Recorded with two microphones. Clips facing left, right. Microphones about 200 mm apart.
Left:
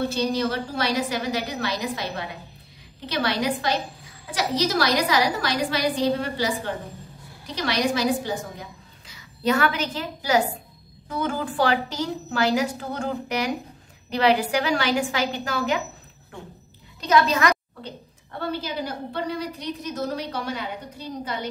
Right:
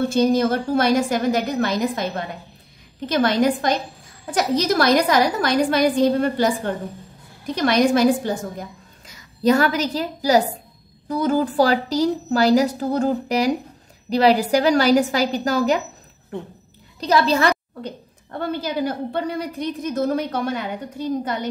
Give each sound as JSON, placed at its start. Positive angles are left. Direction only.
{"t": 0.1, "sound": "a woman's voice", "side_deg": -50}
{"t": 17.0, "sound": "a woman's voice", "side_deg": -35}
{"t": 18.5, "sound": "a woman's voice", "side_deg": -50}